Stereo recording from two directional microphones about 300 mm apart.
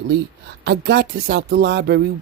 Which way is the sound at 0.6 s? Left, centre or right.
Right.